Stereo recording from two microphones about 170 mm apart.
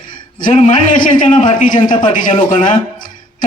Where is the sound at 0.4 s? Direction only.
45° left (ahead or behind).